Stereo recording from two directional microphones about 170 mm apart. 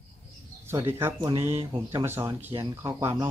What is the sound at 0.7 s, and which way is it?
Speech, 15° right (ahead or behind).